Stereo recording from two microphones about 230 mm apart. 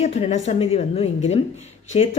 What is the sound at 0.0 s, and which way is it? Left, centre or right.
Speech, left.